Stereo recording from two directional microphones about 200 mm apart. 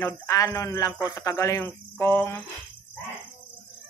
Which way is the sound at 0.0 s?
15° left (ahead or behind).